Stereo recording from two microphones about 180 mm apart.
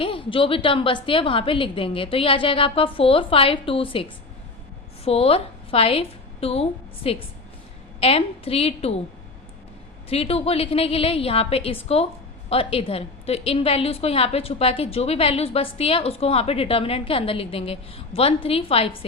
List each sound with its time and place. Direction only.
0.0 s a woman's voice: 30° left (ahead or behind)
5.0 s a woman's voice: 35° left (ahead or behind)
10.1 s a woman's voice: 35° left (ahead or behind)